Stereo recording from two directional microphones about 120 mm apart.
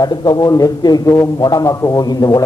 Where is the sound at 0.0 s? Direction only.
35° left (ahead or behind).